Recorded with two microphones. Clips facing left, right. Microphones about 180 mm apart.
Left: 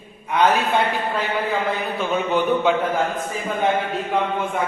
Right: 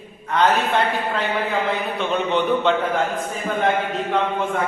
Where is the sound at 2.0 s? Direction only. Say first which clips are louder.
Left 1 dB; 5° left (ahead or behind).